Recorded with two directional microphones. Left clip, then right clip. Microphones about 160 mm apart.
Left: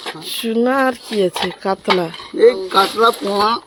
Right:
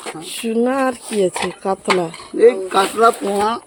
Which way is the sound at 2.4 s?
25° right (ahead or behind).